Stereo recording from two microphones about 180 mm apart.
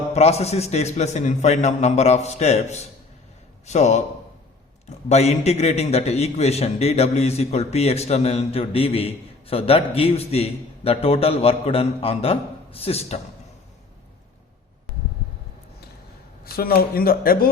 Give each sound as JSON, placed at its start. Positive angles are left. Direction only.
{"t": 0.1, "sound": "a man's voice", "side_deg": 35}
{"t": 5.0, "sound": "a man's voice", "side_deg": 40}
{"t": 16.4, "sound": "speech", "side_deg": 55}